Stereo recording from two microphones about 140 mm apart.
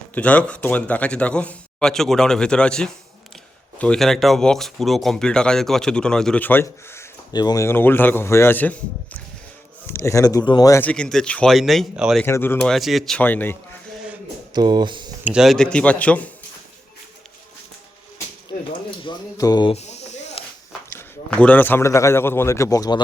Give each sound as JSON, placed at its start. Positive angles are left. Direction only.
{"t": 0.1, "sound": "speech", "side_deg": 10}
{"t": 7.3, "sound": "speech", "side_deg": 25}
{"t": 9.8, "sound": "speech", "side_deg": 20}
{"t": 10.8, "sound": "speech", "side_deg": 10}
{"t": 12.2, "sound": "speech", "side_deg": 15}
{"t": 12.5, "sound": "speech", "side_deg": 0}
{"t": 14.5, "sound": "speech", "side_deg": -30}
{"t": 15.2, "sound": "speech", "side_deg": -5}
{"t": 19.0, "sound": "speech", "side_deg": 30}
{"t": 19.7, "sound": "snake", "side_deg": 50}
{"t": 21.2, "sound": "speech", "side_deg": 10}